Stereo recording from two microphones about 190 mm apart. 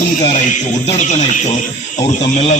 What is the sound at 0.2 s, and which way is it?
A man's voice, 35° left (ahead or behind).